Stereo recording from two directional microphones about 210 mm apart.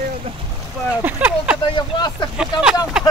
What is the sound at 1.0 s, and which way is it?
Speech, 5° right (ahead or behind).